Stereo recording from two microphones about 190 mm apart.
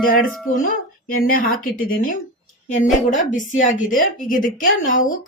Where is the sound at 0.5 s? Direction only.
45° left (ahead or behind).